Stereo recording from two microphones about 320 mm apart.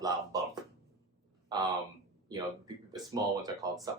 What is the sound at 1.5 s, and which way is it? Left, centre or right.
Speech, centre.